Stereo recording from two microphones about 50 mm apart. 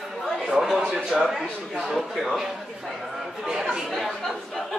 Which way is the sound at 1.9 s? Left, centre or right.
Centre.